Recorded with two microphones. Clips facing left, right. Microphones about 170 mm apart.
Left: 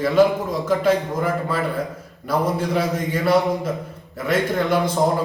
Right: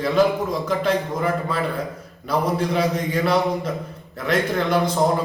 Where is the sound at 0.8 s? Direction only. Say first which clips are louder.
Left 2 dB; 5° left (ahead or behind).